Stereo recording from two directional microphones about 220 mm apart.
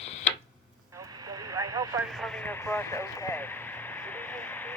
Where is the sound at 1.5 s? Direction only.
15° right (ahead or behind).